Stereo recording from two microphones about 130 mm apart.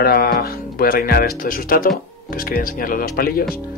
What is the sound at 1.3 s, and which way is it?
Speech, 90° left.